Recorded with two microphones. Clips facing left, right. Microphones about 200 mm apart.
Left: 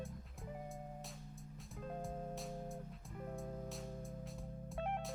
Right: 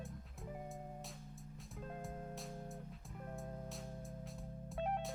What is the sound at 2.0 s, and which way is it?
Music, centre (ahead or behind).